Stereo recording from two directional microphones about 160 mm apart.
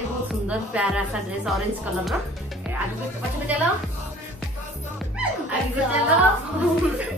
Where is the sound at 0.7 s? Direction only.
5° right (ahead or behind).